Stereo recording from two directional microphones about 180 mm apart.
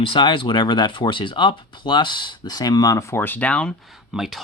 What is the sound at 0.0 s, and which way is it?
Speech, 30° left (ahead or behind).